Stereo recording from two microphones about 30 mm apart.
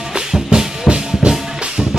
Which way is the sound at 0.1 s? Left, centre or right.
Right.